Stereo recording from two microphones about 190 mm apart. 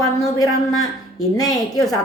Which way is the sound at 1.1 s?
20° left (ahead or behind).